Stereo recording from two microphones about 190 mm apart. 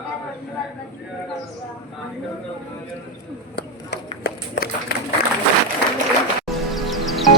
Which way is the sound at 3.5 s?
55° left (ahead or behind).